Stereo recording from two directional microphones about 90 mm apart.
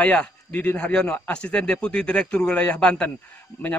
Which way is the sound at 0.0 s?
15° left (ahead or behind).